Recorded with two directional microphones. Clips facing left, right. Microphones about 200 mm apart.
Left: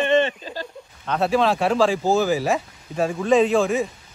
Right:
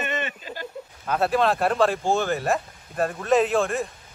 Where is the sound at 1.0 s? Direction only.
5° right (ahead or behind).